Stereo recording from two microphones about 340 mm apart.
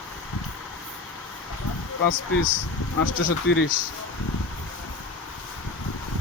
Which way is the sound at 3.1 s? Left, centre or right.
Left.